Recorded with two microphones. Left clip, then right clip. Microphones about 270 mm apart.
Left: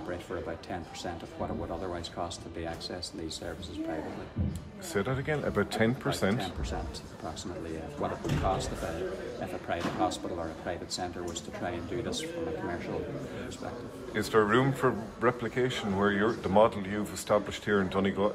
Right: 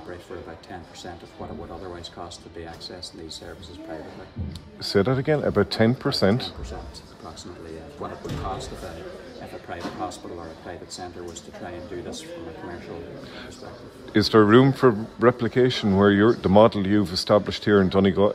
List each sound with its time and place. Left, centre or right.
4.8 s speech: right
11.6 s speech: centre
14.1 s speech: right